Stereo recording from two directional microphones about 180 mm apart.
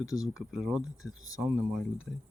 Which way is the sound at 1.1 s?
90° right.